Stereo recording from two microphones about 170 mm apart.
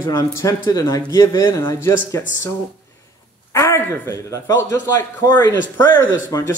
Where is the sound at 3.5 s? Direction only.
15° left (ahead or behind).